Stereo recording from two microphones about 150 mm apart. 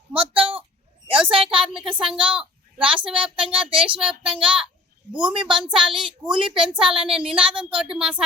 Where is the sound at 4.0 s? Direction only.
5° right (ahead or behind).